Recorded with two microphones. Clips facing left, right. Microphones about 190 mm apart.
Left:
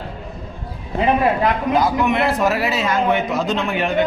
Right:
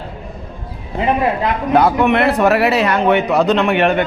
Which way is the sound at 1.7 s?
60° right (ahead or behind).